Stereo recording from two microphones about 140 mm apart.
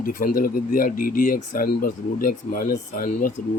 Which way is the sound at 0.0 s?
80° left.